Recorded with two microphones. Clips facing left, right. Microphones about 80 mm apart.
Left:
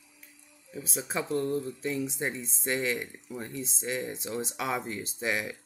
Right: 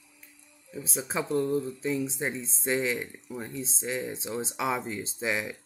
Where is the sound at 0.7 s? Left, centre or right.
Centre.